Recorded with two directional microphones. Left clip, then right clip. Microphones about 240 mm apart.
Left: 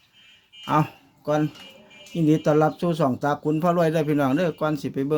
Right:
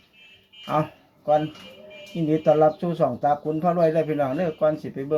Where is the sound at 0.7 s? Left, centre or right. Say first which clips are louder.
Left 2 dB; left.